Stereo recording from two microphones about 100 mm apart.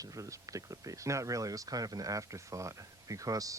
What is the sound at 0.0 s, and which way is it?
Speech, 35° right (ahead or behind).